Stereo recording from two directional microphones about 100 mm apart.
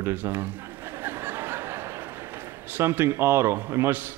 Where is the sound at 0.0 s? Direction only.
20° right (ahead or behind).